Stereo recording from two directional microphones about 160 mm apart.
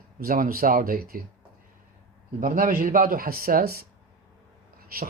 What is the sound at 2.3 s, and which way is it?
Speech, 60° right (ahead or behind).